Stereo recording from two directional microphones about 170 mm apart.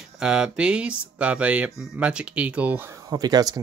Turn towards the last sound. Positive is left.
turn(degrees=-20)  # may be behind; listen again after turning